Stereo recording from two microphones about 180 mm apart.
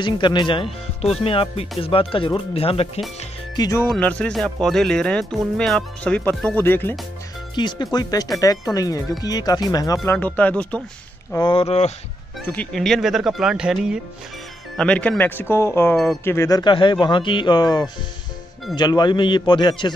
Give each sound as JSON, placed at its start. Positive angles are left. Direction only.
{"t": 0.0, "sound": "speech", "side_deg": 25}
{"t": 3.5, "sound": "speech", "side_deg": 20}
{"t": 3.8, "sound": "speech", "side_deg": 5}
{"t": 7.5, "sound": "speech", "side_deg": 25}
{"t": 10.0, "sound": "speech", "side_deg": 10}
{"t": 11.3, "sound": "speech", "side_deg": 30}
{"t": 12.5, "sound": "speech", "side_deg": 0}
{"t": 14.8, "sound": "speech", "side_deg": 5}